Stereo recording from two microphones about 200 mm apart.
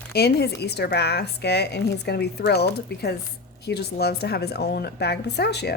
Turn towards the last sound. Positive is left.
turn(degrees=55)  # may be behind; listen again after turning